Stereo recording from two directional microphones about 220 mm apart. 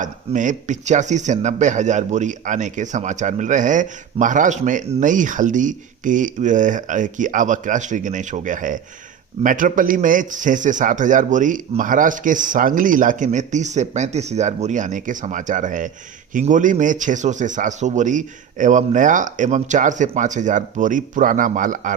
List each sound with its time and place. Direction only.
0.0 s speech: 35° right (ahead or behind)